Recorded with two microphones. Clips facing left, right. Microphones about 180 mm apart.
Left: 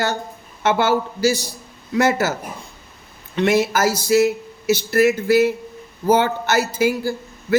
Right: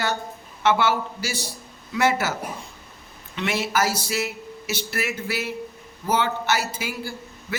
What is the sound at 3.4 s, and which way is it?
A man's voice, 40° left (ahead or behind).